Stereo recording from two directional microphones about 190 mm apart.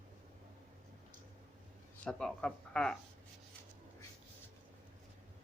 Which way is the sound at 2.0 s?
5° left (ahead or behind).